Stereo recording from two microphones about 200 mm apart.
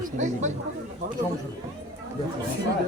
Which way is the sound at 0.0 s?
35° right (ahead or behind).